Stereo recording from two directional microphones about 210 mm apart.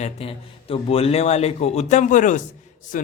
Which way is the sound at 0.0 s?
30° left (ahead or behind).